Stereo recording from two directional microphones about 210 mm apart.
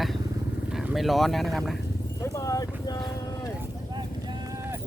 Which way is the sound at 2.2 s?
15° left (ahead or behind).